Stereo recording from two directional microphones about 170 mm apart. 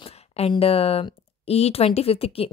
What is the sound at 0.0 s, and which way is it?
A woman's voice, 35° left (ahead or behind).